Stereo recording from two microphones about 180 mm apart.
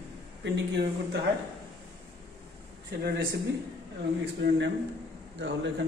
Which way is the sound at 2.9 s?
65° right (ahead or behind).